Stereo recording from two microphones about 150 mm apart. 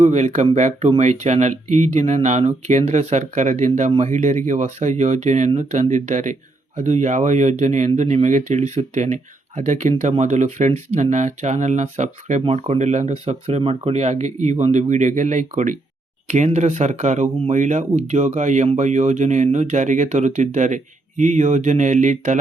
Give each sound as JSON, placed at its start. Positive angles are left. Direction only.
{"t": 0.0, "sound": "speech", "side_deg": -50}